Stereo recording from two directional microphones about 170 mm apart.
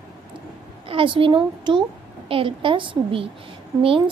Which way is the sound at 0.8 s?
30° right (ahead or behind).